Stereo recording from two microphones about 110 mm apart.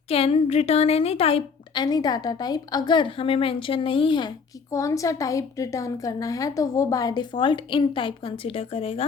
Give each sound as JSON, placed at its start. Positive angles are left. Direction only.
{"t": 0.1, "sound": "a woman's voice", "side_deg": 60}
{"t": 1.7, "sound": "a woman's voice", "side_deg": 40}
{"t": 4.7, "sound": "a woman's voice", "side_deg": 30}